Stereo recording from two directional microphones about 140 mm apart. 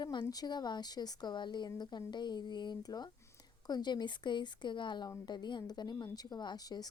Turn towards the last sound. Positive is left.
turn(degrees=30)  # may be behind; listen again after turning